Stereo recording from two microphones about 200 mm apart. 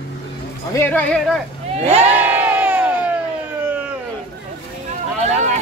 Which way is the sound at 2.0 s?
10° right (ahead or behind).